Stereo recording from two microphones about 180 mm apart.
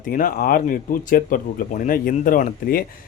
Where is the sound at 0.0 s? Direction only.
50° left (ahead or behind).